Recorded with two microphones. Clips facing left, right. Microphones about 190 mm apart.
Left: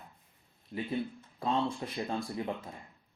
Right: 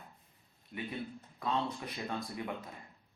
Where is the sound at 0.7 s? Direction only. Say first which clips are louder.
Left 6 dB; 30° left (ahead or behind).